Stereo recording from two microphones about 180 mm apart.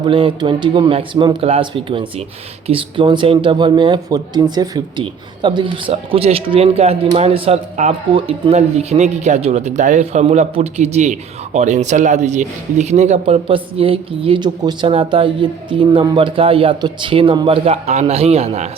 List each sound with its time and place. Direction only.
0.0 s speech: 25° right (ahead or behind)